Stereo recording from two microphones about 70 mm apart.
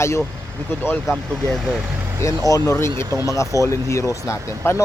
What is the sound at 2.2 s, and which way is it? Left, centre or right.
Speech, left.